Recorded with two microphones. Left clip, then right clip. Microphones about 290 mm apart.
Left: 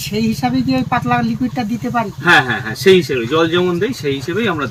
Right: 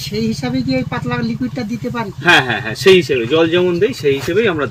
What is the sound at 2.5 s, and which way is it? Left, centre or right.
Speech, centre.